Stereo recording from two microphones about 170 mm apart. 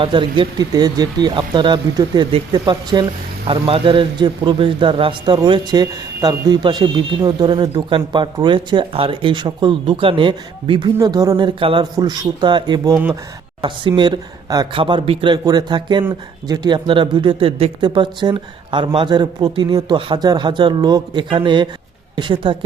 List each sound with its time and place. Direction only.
0.0 s a woman's voice: 30° right (ahead or behind)